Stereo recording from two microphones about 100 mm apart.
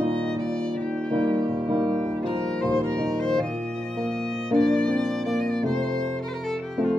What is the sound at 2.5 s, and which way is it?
Violin, 5° left (ahead or behind).